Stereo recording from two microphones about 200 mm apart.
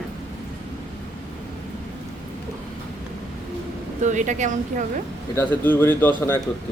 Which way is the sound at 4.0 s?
40° right (ahead or behind).